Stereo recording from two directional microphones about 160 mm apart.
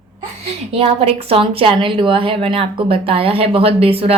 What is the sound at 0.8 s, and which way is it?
Speech, 40° right (ahead or behind).